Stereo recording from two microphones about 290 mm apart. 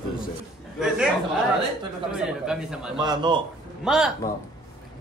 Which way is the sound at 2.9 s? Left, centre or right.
Centre.